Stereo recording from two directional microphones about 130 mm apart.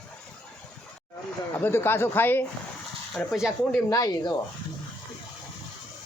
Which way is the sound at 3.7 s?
30° left (ahead or behind).